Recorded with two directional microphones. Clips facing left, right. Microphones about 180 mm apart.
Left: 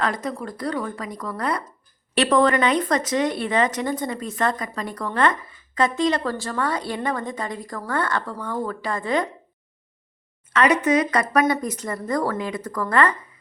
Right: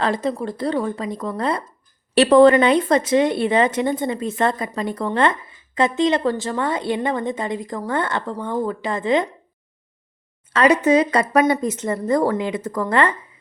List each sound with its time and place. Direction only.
0.0 s speech: 25° right (ahead or behind)
10.5 s speech: 30° right (ahead or behind)